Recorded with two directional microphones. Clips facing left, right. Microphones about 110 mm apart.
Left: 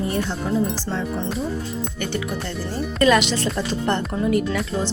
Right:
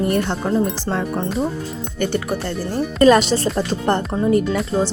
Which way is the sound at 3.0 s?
40° right (ahead or behind).